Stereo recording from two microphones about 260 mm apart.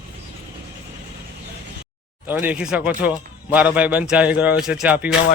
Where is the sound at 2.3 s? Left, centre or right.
Centre.